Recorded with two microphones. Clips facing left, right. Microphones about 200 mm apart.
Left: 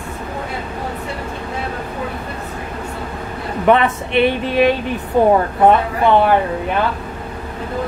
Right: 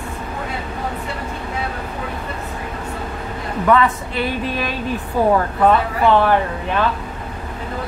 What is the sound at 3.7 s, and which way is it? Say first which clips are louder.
Speech: left 2 dB; 25° left (ahead or behind).